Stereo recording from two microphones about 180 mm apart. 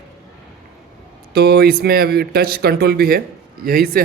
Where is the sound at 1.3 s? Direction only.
60° right (ahead or behind).